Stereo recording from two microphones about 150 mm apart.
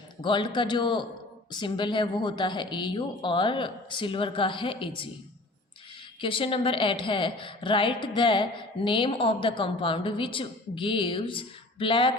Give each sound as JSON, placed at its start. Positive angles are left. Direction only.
{"t": 0.2, "sound": "a woman's voice", "side_deg": 30}
{"t": 6.1, "sound": "a woman's voice", "side_deg": 35}